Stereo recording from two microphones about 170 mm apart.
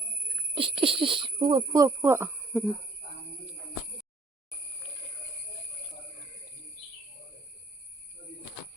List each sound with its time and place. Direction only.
0.5 s speech: 30° right (ahead or behind); by 2.6 s 10° right (ahead or behind)